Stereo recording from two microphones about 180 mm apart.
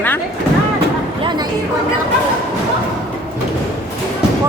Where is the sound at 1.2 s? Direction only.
25° right (ahead or behind).